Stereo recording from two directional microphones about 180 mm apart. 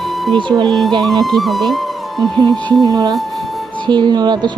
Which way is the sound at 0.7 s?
Centre (ahead or behind).